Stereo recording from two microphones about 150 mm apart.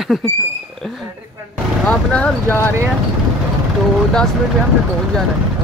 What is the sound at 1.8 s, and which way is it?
Speech, 5° left (ahead or behind).